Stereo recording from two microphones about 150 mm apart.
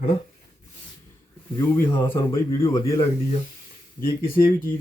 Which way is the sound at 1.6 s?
20° left (ahead or behind).